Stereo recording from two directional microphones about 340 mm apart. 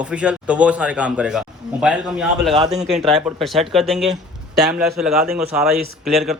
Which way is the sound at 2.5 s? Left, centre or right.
Centre.